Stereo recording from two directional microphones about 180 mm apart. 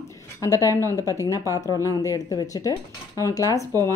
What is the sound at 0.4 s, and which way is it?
Speech, 20° left (ahead or behind).